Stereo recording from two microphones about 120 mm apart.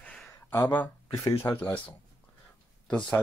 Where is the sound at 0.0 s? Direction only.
5° left (ahead or behind).